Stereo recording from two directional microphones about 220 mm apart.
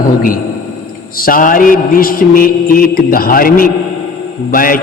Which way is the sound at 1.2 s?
40° left (ahead or behind).